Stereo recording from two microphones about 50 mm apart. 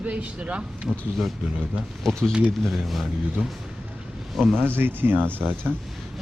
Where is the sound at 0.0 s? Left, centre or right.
Right.